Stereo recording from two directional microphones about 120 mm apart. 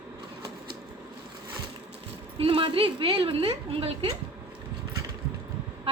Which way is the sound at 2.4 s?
45° right (ahead or behind).